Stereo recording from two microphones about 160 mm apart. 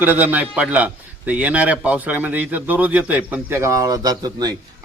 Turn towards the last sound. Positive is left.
turn(degrees=-25)  # may be behind; listen again after turning